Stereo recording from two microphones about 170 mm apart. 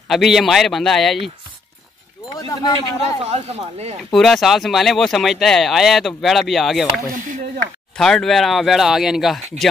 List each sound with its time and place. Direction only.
0.1 s speech: centre (ahead or behind)
2.3 s speech: 20° left (ahead or behind)
3.0 s speech: 40° right (ahead or behind)
4.1 s speech: centre (ahead or behind)
7.2 s a sound: 50° right (ahead or behind)
8.0 s speech: centre (ahead or behind)